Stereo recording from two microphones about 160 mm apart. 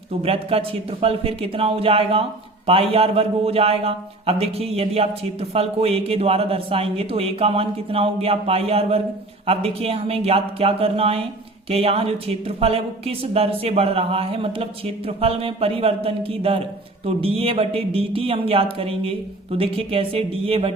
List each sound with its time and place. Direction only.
0.2 s a man's voice: 35° right (ahead or behind)